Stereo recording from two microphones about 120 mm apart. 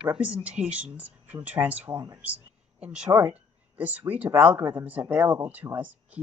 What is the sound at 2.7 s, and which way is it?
Speech, 5° right (ahead or behind).